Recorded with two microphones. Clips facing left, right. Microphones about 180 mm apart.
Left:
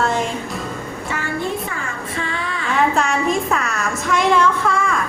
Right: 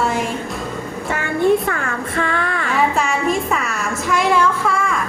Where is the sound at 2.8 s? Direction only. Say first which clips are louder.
Left 1 dB; 5° right (ahead or behind).